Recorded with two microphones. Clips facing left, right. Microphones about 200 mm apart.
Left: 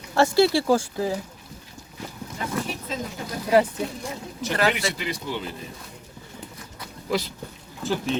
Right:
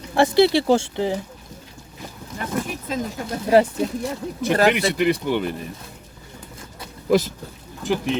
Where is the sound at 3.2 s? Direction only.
25° right (ahead or behind).